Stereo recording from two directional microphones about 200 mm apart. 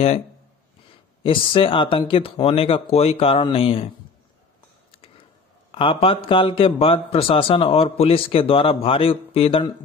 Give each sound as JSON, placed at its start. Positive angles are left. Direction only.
{"t": 1.2, "sound": "a man's voice", "side_deg": 25}
{"t": 4.9, "sound": "a sound", "side_deg": 25}
{"t": 5.7, "sound": "a man's voice", "side_deg": 25}